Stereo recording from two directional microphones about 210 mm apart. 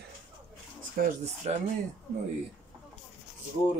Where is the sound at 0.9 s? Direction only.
30° right (ahead or behind).